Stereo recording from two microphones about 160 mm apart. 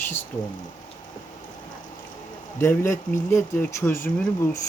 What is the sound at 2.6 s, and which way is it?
Speech, 15° left (ahead or behind).